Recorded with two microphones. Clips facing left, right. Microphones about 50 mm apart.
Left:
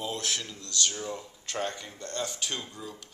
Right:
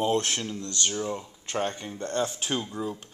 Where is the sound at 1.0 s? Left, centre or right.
Right.